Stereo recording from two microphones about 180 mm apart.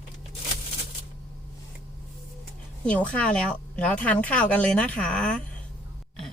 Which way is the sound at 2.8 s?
5° left (ahead or behind).